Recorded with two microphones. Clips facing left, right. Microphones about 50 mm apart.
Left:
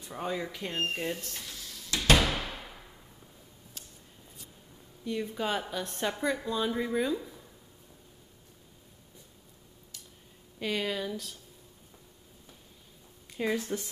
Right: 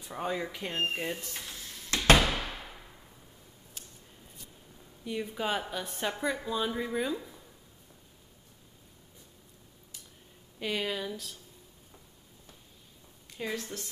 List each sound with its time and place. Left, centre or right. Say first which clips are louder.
0.0 s speech: right 1 dB; centre
1.5 s a sound: right 2 dB; right
2.1 s a sound: even; centre
5.0 s speech: left 1 dB; centre
10.6 s speech: left 1 dB; centre
13.3 s speech: left 5 dB; centre